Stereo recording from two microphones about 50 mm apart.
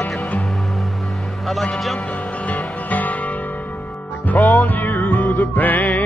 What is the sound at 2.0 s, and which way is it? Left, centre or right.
Music, centre.